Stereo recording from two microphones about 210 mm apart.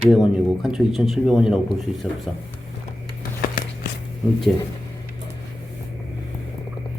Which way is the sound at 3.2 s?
45° left (ahead or behind).